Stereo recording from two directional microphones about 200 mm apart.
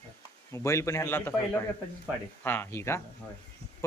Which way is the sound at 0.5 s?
15° left (ahead or behind).